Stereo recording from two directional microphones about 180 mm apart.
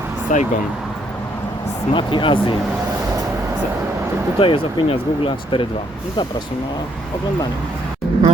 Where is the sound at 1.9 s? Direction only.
25° left (ahead or behind).